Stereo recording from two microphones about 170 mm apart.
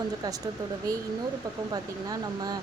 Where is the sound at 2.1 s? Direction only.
20° right (ahead or behind).